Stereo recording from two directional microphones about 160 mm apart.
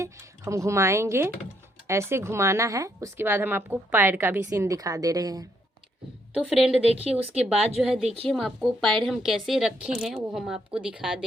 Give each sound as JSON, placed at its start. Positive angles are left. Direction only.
{"t": 0.0, "sound": "speech", "side_deg": -20}
{"t": 6.3, "sound": "a woman's voice", "side_deg": 0}
{"t": 6.9, "sound": "speech", "side_deg": -40}
{"t": 7.8, "sound": "a woman's voice", "side_deg": -5}
{"t": 8.0, "sound": "speech", "side_deg": -40}
{"t": 8.3, "sound": "a woman's voice", "side_deg": 0}